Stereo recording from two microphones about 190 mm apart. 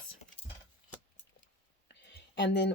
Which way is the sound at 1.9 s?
65° left (ahead or behind).